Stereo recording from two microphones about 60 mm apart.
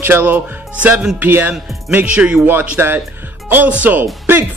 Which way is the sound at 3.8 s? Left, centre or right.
Right.